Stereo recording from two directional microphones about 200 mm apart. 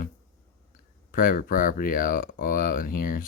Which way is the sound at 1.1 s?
45° left (ahead or behind).